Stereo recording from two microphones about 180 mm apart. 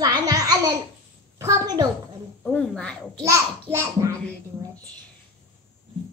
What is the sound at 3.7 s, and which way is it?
Speech, 15° right (ahead or behind).